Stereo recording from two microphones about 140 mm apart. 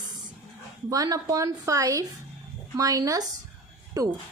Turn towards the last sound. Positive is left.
turn(degrees=-25)  # may be behind; listen again after turning